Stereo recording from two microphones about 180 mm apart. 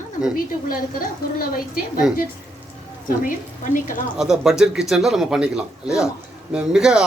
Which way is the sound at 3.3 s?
45° left (ahead or behind).